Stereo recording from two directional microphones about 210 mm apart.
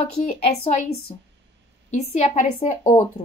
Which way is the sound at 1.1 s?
30° left (ahead or behind).